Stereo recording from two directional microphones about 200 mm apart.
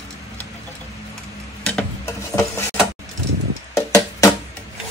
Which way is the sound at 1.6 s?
10° left (ahead or behind).